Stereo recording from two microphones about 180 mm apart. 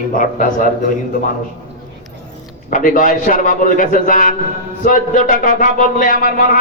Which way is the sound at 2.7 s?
50° left (ahead or behind).